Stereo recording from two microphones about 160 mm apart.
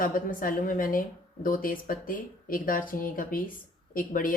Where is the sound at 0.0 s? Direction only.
60° left (ahead or behind).